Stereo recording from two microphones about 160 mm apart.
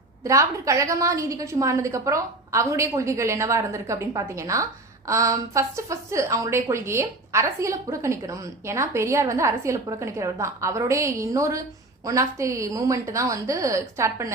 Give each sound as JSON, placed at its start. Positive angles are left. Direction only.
{"t": 0.3, "sound": "a woman's voice", "side_deg": -20}